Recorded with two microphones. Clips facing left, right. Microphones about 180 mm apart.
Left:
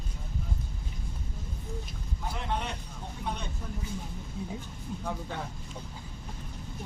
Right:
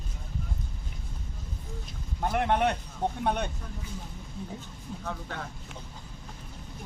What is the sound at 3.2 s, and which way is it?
Speech, 65° right (ahead or behind).